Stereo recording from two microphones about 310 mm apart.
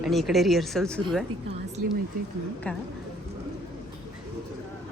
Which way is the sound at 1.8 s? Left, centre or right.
Right.